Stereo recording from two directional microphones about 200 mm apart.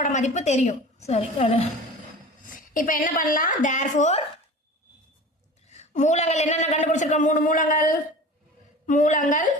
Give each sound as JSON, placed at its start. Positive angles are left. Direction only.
{"t": 0.0, "sound": "a man's voice", "side_deg": 35}
{"t": 2.7, "sound": "a man's voice", "side_deg": 40}
{"t": 5.6, "sound": "a man's voice", "side_deg": 35}